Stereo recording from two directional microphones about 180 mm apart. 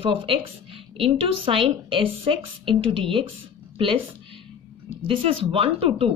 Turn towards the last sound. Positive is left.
turn(degrees=-30)  # may be behind; listen again after turning